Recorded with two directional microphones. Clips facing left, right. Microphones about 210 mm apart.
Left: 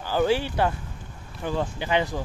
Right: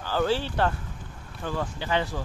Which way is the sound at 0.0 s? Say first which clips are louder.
Left 3 dB; 15° left (ahead or behind).